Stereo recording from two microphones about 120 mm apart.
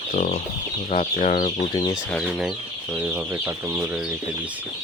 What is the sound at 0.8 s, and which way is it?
Speech, 90° left.